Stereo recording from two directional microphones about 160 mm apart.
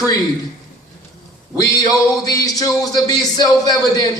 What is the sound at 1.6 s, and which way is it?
Speech, 20° left (ahead or behind).